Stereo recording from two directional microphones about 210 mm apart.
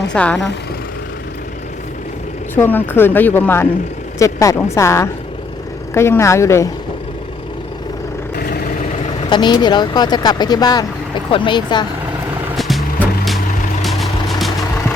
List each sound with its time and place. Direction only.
0.1 s speech: 5° left (ahead or behind)
2.6 s speech: 10° left (ahead or behind)
9.3 s speech: 20° left (ahead or behind)
12.5 s music: centre (ahead or behind)
13.8 s vehicle: centre (ahead or behind)